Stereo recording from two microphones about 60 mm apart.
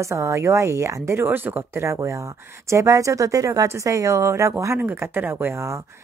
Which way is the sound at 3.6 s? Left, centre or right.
Right.